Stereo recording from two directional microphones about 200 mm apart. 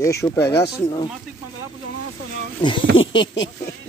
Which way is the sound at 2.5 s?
25° left (ahead or behind).